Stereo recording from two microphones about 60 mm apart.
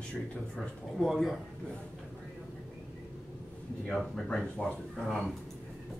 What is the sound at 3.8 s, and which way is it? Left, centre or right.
Speech, centre.